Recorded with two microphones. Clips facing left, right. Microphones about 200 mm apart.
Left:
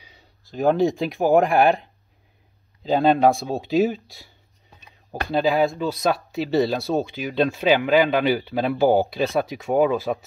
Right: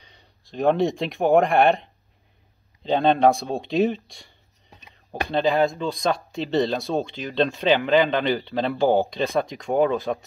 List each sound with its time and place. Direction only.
0.0 s speech: 5° left (ahead or behind)
4.8 s a sound: 15° right (ahead or behind)
5.3 s speech: centre (ahead or behind)